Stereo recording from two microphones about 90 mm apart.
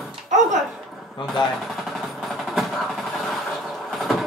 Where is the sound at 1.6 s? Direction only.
Centre (ahead or behind).